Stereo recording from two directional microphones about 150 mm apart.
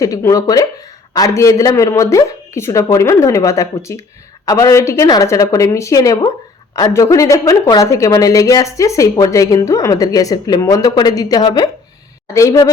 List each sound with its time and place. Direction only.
0.0 s a woman's voice: 20° left (ahead or behind)